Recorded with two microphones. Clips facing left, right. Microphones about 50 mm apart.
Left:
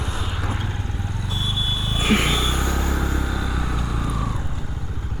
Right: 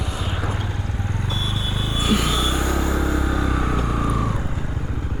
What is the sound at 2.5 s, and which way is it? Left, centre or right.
Vehicle, centre.